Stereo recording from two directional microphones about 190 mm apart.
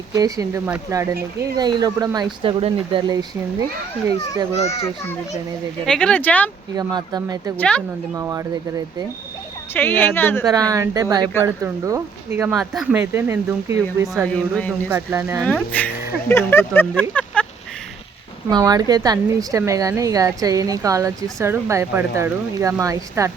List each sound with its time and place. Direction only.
0.1 s a woman's voice: 20° right (ahead or behind)
4.7 s speech: 15° left (ahead or behind)
5.8 s speech: 5° left (ahead or behind)
6.7 s a woman's voice: 20° right (ahead or behind)
7.5 s speech: 5° left (ahead or behind)
8.1 s speech: 15° right (ahead or behind)
9.7 s speech: 10° left (ahead or behind)
10.5 s a woman's voice: 20° right (ahead or behind)
14.3 s speech: 5° left (ahead or behind)
14.8 s speech: 10° right (ahead or behind)
15.4 s speech: 10° left (ahead or behind)
18.4 s a woman's voice: 20° right (ahead or behind)